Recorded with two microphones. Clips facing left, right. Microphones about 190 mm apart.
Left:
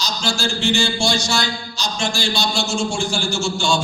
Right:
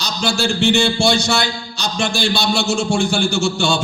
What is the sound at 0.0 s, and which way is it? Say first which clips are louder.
A man's voice: right 3 dB; 60° right (ahead or behind).